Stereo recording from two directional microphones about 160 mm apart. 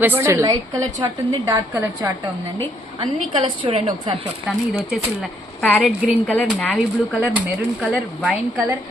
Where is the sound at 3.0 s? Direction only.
25° right (ahead or behind).